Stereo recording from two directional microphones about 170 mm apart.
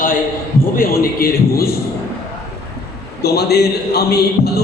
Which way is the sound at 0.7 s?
60° left (ahead or behind).